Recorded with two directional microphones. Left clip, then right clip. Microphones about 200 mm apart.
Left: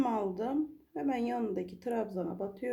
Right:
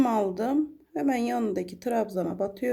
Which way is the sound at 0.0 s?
35° right (ahead or behind).